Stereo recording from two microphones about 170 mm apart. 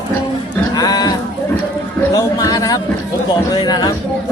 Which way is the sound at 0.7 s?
20° left (ahead or behind).